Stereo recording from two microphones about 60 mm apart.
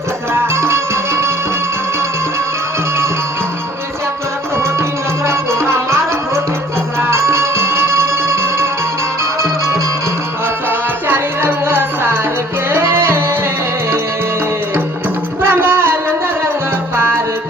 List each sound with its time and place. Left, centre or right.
0.3 s music: right
4.5 s music: right
10.7 s music: right
15.4 s music: right